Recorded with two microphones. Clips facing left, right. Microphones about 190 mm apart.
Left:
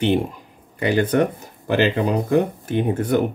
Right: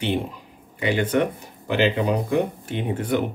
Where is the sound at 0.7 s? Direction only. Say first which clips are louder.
Left 3 dB; 40° left (ahead or behind).